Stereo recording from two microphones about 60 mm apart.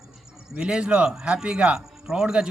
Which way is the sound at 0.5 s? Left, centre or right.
Centre.